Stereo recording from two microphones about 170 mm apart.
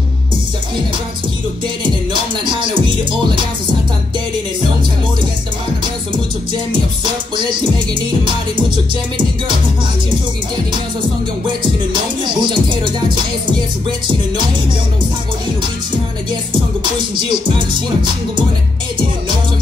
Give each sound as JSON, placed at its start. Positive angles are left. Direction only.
{"t": 11.9, "sound": "music", "side_deg": -30}